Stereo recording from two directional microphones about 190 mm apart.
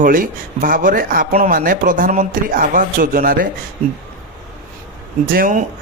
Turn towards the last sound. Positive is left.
turn(degrees=-50)  # may be behind; listen again after turning